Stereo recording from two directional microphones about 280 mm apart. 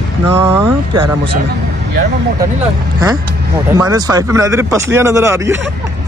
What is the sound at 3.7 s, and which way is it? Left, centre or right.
Speech, centre.